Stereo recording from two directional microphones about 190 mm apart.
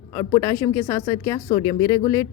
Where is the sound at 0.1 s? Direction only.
20° left (ahead or behind).